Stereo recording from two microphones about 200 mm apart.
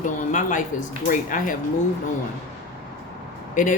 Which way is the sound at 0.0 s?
40° left (ahead or behind).